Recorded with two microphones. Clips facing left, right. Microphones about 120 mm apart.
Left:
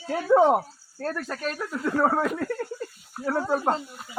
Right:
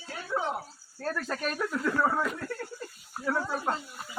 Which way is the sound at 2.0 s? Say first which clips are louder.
Left 6 dB; 45° left (ahead or behind).